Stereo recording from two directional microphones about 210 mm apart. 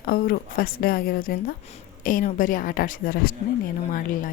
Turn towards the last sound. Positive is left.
turn(degrees=40)  # may be behind; listen again after turning